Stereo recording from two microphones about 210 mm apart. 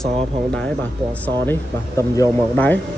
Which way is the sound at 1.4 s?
15° left (ahead or behind).